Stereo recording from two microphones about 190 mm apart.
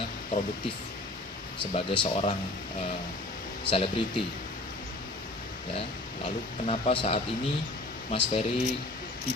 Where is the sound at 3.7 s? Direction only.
30° left (ahead or behind).